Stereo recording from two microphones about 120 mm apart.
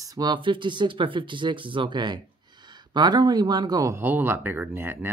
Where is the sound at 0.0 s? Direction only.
35° right (ahead or behind).